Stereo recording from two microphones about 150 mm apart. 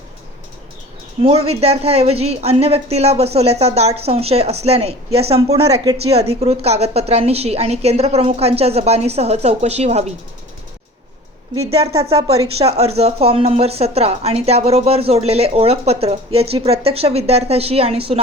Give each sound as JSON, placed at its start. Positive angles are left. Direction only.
{"t": 1.2, "sound": "a woman's voice", "side_deg": -40}
{"t": 11.9, "sound": "a woman's voice", "side_deg": -40}